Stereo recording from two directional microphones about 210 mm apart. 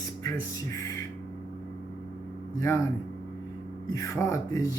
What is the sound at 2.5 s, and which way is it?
Speech, 15° left (ahead or behind).